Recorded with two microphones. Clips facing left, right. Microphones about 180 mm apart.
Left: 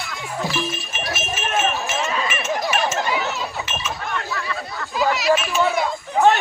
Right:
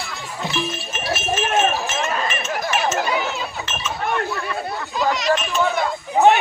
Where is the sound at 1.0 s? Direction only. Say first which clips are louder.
Right 3 dB; 30° right (ahead or behind).